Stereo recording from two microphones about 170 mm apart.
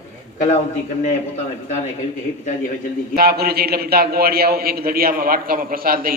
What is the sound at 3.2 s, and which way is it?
A man's voice, 65° right (ahead or behind).